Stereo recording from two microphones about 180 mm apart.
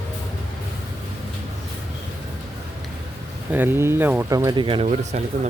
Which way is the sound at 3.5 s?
10° right (ahead or behind).